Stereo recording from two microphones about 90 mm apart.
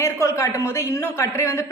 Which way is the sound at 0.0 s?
35° left (ahead or behind).